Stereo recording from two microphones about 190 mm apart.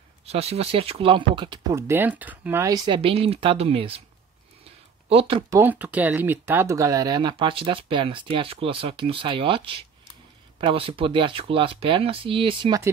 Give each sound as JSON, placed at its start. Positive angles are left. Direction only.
{"t": 0.2, "sound": "speech", "side_deg": -35}
{"t": 5.1, "sound": "speech", "side_deg": -30}
{"t": 5.5, "sound": "speech", "side_deg": -10}